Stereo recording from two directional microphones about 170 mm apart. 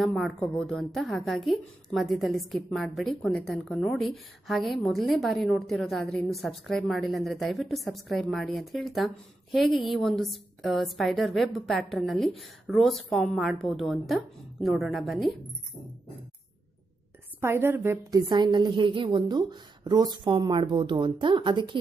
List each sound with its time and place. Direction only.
0.0 s a woman's voice: centre (ahead or behind)
17.4 s a woman's voice: 15° right (ahead or behind)
18.2 s a woman's voice: 25° right (ahead or behind)